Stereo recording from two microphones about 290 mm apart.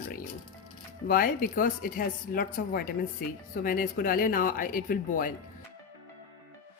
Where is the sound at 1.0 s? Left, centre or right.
Left.